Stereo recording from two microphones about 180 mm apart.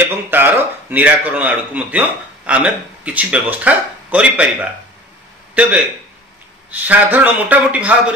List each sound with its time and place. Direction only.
0.0 s speech: 10° right (ahead or behind)